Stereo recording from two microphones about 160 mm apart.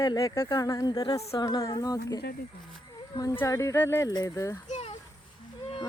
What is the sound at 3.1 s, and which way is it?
Speech, 20° left (ahead or behind).